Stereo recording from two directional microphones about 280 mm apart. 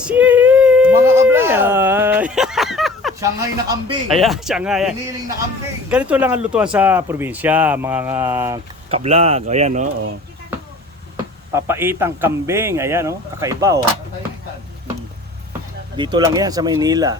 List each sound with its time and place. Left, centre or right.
0.0 s a sound: centre
3.2 s speech: centre
4.1 s speech: centre
8.9 s speech: right
11.5 s speech: centre
16.0 s speech: centre